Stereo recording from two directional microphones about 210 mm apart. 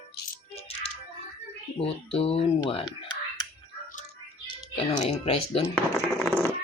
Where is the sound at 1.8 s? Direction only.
25° left (ahead or behind).